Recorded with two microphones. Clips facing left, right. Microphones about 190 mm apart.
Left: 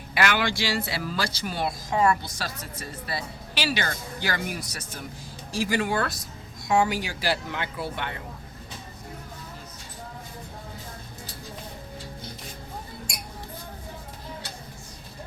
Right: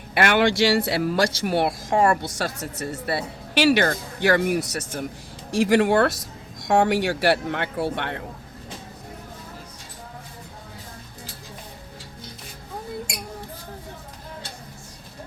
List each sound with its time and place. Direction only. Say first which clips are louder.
0.1 s speech: right 6 dB; 55° right (ahead or behind)
2.6 s speech: right 7 dB; 70° right (ahead or behind)